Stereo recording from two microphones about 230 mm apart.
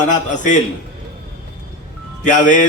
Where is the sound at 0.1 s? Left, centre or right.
Left.